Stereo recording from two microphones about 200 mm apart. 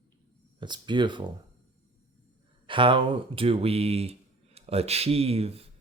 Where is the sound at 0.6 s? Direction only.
25° right (ahead or behind).